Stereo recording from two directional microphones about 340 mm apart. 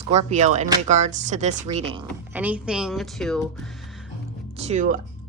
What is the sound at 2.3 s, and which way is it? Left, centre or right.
A woman's voice, centre.